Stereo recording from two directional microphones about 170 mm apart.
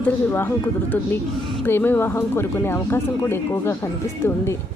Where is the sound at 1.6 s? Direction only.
10° left (ahead or behind).